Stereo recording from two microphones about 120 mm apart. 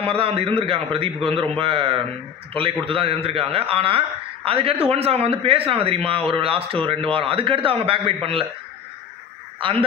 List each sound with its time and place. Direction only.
0.0 s a man's voice: 50° right (ahead or behind)
9.6 s speech: 45° right (ahead or behind)